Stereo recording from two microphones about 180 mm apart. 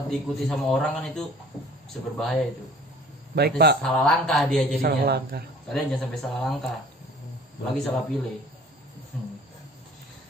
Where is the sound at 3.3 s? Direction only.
65° right (ahead or behind).